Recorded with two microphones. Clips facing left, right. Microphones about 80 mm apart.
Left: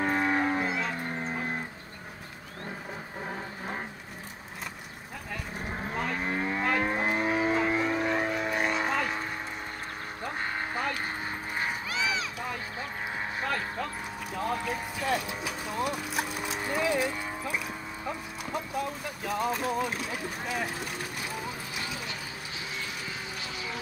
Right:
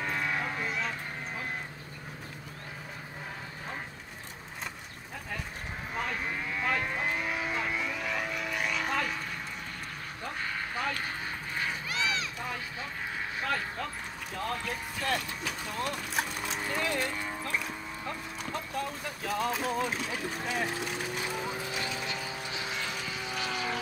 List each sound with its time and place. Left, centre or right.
0.0 s a sound: left
1.2 s livestock: left
3.3 s a sound: left
6.2 s moo: left
6.8 s vehicle: left
10.3 s vehicle: left
11.1 s clip-clop: left
12.0 s run: centre
13.5 s dog: centre
14.3 s a sound: centre
23.3 s vehicle: right